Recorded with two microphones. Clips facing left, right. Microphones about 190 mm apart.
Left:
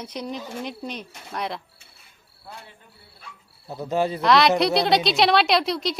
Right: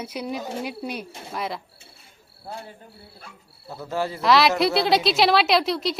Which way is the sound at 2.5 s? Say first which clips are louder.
Right 6 dB; 35° right (ahead or behind).